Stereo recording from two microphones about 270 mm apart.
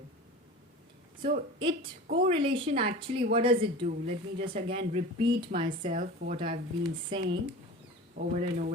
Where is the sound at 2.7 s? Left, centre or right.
Right.